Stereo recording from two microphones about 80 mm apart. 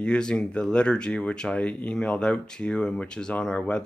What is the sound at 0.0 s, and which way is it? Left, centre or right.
Speech, centre.